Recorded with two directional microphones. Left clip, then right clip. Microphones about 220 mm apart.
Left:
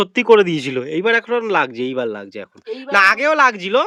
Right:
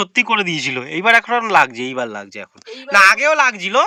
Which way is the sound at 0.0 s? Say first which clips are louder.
Left 4 dB; 15° left (ahead or behind).